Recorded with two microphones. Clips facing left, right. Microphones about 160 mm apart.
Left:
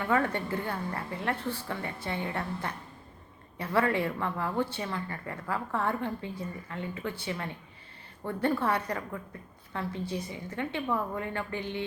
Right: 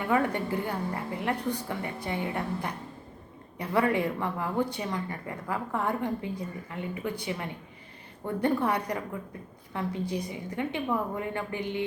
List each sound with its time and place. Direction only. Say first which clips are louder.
0.0 s a woman's voice: right 1 dB; 15° right (ahead or behind)